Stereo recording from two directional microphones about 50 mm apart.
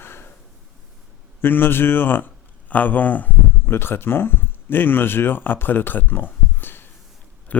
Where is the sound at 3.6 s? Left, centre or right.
Left.